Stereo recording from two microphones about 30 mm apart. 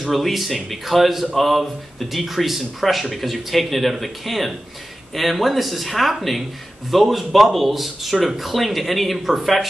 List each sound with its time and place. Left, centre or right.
0.0 s speech: centre
9.2 s speech: centre